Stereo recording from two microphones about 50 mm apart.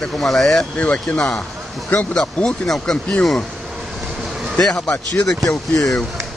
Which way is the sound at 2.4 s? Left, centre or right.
Centre.